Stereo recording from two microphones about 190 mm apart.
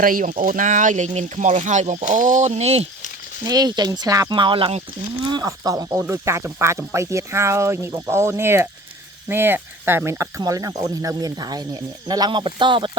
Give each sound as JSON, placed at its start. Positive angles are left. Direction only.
{"t": 0.0, "sound": "speech", "side_deg": -45}
{"t": 3.4, "sound": "speech", "side_deg": -20}